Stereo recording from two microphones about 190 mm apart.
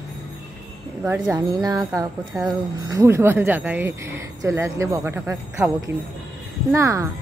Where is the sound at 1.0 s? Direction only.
15° right (ahead or behind).